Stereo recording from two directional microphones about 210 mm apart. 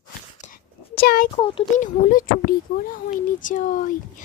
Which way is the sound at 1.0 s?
45° left (ahead or behind).